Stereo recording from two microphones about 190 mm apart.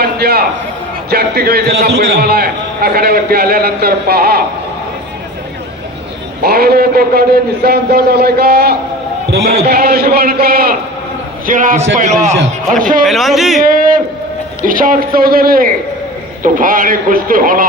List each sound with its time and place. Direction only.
0.0 s a sound: 55° right (ahead or behind)
1.1 s a man's voice: 55° right (ahead or behind)
6.4 s a man's voice: 55° right (ahead or behind)
13.1 s speech: centre (ahead or behind)
13.7 s a sound: 45° right (ahead or behind)
14.6 s speech: 45° right (ahead or behind)